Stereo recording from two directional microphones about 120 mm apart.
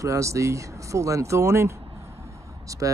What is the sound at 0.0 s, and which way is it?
Speech, 25° right (ahead or behind).